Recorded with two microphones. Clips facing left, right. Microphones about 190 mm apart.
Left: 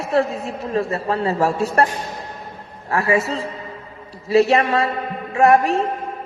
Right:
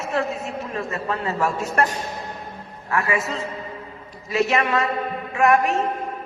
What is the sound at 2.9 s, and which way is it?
A man's voice, 35° left (ahead or behind).